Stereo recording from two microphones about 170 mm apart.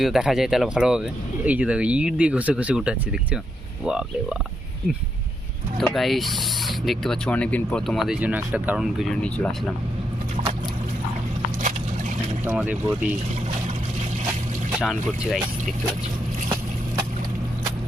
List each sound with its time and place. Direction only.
0.0 s speech: centre (ahead or behind)
5.7 s speech: centre (ahead or behind)
12.5 s speech: 10° right (ahead or behind)
14.8 s speech: 5° right (ahead or behind)